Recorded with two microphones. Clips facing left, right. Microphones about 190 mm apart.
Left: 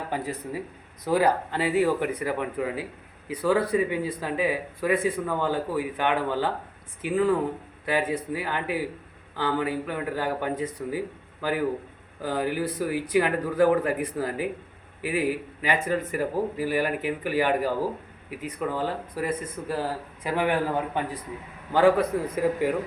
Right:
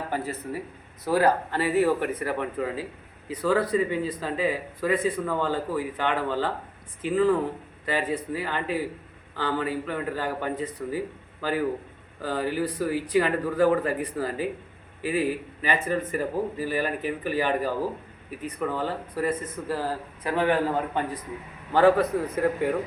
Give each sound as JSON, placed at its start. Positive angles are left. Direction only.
{"t": 0.1, "sound": "speech", "side_deg": 15}